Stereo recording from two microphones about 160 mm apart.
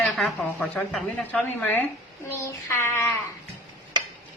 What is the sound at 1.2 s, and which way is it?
Child singing, 10° left (ahead or behind).